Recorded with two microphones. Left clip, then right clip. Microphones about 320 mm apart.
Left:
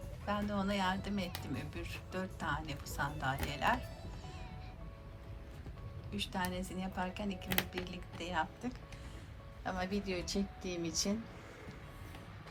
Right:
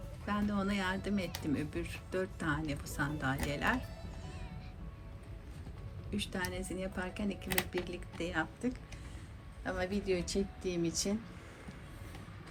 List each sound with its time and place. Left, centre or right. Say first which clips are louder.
0.3 s speech: even; centre
6.1 s speech: even; centre
10.2 s speech: right 3 dB; left